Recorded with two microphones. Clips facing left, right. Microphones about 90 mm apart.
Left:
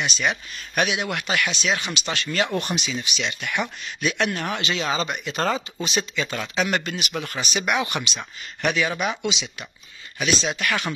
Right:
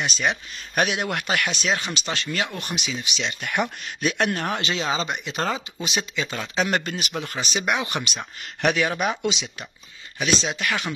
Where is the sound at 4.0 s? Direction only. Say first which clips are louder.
Right 1 dB; 45° right (ahead or behind); by 6.4 s 15° right (ahead or behind).